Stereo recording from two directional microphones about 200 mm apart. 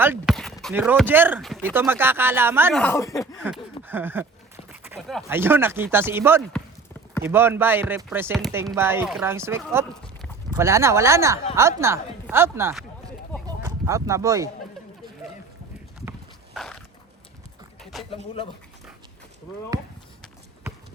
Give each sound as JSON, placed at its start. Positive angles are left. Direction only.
{"t": 0.3, "sound": "a sound", "side_deg": 0}
{"t": 0.7, "sound": "chopping", "side_deg": -10}
{"t": 1.4, "sound": "speech", "side_deg": 0}
{"t": 1.6, "sound": "chopping", "side_deg": -10}
{"t": 2.7, "sound": "speech", "side_deg": 10}
{"t": 3.4, "sound": "a sound", "side_deg": -10}
{"t": 4.7, "sound": "clip-clop", "side_deg": -10}
{"t": 4.9, "sound": "speech", "side_deg": 0}
{"t": 5.3, "sound": "chopping", "side_deg": -10}
{"t": 11.8, "sound": "speech", "side_deg": -15}
{"t": 16.6, "sound": "dog", "side_deg": 0}
{"t": 17.9, "sound": "a sound", "side_deg": 0}